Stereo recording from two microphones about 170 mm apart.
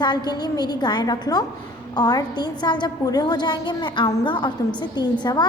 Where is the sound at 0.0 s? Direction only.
25° left (ahead or behind).